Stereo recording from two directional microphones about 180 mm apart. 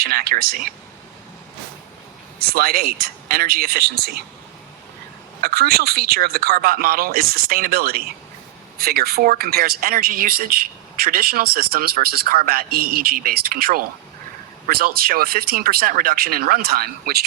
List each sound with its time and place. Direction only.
0.0 s speech: 55° right (ahead or behind)
2.4 s speech: 60° right (ahead or behind)
5.4 s speech: 60° right (ahead or behind)